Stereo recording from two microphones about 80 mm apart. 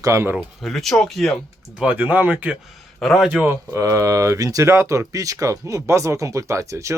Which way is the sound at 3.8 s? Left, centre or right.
Right.